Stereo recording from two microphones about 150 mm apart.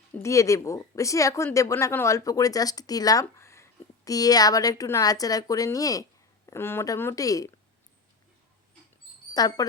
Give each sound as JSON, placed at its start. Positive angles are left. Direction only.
{"t": 0.2, "sound": "speech", "side_deg": 20}
{"t": 9.3, "sound": "speech", "side_deg": 25}